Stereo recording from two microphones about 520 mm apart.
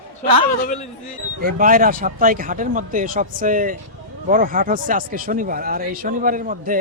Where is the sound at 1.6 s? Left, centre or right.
Centre.